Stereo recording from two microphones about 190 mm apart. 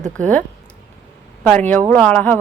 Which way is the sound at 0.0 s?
5° left (ahead or behind).